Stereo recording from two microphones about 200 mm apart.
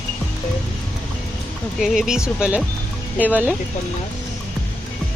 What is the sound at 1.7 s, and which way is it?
Speech, centre (ahead or behind).